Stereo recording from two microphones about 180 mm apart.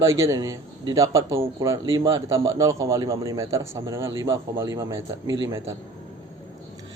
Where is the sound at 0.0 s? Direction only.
15° right (ahead or behind).